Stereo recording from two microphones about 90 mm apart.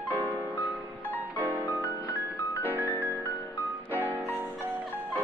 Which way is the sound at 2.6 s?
20° left (ahead or behind).